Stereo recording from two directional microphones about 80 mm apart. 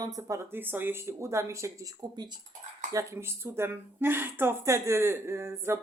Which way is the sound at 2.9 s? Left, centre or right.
Right.